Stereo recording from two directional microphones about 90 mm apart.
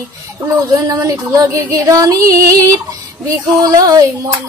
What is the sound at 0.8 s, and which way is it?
Child singing, 40° right (ahead or behind).